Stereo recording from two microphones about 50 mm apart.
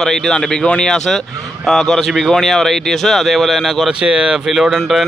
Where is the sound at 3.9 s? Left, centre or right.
Centre.